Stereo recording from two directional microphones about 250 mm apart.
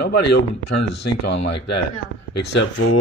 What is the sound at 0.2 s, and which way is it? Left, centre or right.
A woman's voice, left.